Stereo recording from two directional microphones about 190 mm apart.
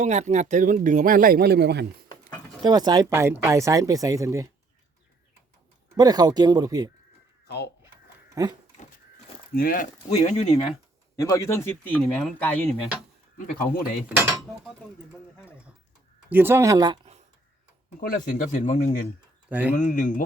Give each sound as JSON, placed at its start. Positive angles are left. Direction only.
{"t": 0.0, "sound": "speech", "side_deg": -35}
{"t": 2.6, "sound": "speech", "side_deg": -20}
{"t": 6.0, "sound": "speech", "side_deg": -20}
{"t": 7.4, "sound": "a sound", "side_deg": 60}
{"t": 8.4, "sound": "speech", "side_deg": -15}
{"t": 9.6, "sound": "speech", "side_deg": 45}
{"t": 11.2, "sound": "speech", "side_deg": 15}
{"t": 16.3, "sound": "speech", "side_deg": -10}
{"t": 18.0, "sound": "speech", "side_deg": 45}
{"t": 19.5, "sound": "speech", "side_deg": -10}
{"t": 19.7, "sound": "speech", "side_deg": 45}